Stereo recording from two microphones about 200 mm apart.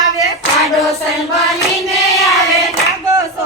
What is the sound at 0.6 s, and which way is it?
Choir, centre (ahead or behind).